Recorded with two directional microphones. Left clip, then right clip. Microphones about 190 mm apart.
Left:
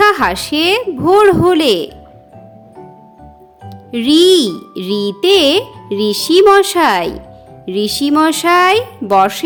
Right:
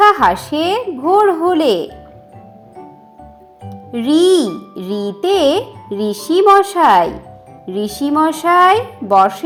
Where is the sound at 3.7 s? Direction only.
25° left (ahead or behind).